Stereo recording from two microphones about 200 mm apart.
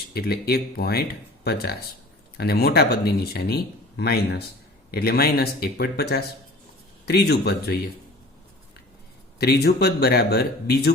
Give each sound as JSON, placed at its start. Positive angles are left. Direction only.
{"t": 0.1, "sound": "speech", "side_deg": 50}
{"t": 9.4, "sound": "speech", "side_deg": 50}